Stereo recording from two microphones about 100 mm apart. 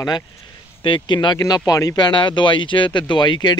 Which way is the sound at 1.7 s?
35° left (ahead or behind).